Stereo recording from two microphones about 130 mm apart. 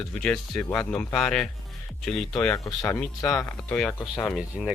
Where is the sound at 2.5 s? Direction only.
25° left (ahead or behind).